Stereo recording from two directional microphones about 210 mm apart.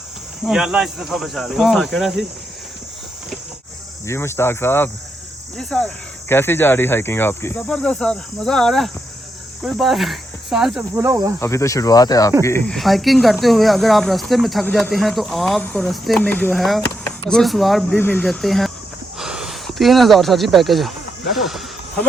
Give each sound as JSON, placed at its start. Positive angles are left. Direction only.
{"t": 0.4, "sound": "speech", "side_deg": -5}
{"t": 4.0, "sound": "speech", "side_deg": 15}
{"t": 11.0, "sound": "cricket", "side_deg": -15}
{"t": 11.3, "sound": "speech", "side_deg": 15}
{"t": 21.3, "sound": "snake", "side_deg": 0}